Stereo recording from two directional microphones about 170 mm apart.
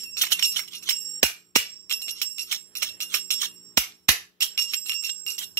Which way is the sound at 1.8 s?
15° left (ahead or behind).